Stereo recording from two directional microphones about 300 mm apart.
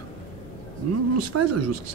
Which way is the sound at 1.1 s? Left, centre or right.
Right.